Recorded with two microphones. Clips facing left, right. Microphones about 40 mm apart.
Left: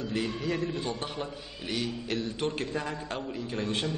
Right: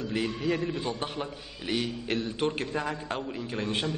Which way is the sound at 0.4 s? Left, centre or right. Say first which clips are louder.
Right 2 dB; centre.